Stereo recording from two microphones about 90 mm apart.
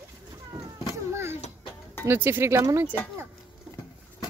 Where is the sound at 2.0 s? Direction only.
25° right (ahead or behind).